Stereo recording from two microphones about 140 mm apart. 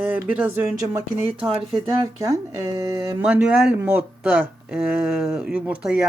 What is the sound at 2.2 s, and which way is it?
Speech, 25° right (ahead or behind).